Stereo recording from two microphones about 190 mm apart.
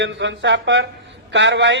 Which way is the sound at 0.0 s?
75° right (ahead or behind).